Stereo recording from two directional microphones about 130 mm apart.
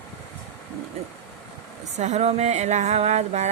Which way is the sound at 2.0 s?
65° right (ahead or behind).